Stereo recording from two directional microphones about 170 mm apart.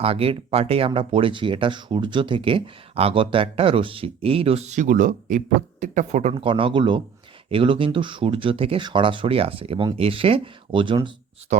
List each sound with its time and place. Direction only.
0.0 s speech: 35° right (ahead or behind)